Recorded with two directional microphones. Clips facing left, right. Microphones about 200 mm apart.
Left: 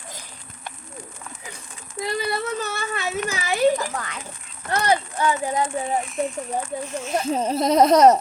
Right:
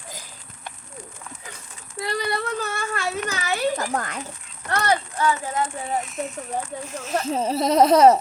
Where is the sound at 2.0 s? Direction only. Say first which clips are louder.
Left 1 dB; 5° left (ahead or behind).